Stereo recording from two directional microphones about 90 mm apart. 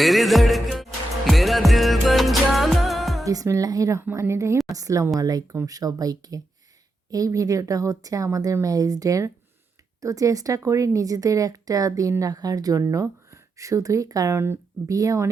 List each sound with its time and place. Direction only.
0.0 s music: centre (ahead or behind)
3.2 s speech: 35° right (ahead or behind)
14.3 s speech: 25° right (ahead or behind)
14.8 s speech: 40° right (ahead or behind)